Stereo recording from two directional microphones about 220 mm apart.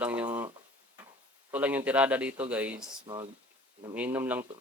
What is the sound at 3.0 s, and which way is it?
Speech, 20° right (ahead or behind).